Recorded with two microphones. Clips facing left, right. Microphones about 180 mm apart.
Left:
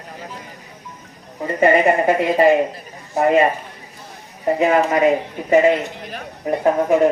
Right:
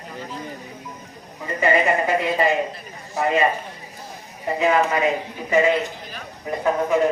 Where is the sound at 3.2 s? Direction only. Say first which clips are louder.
Left 6 dB; 50° left (ahead or behind).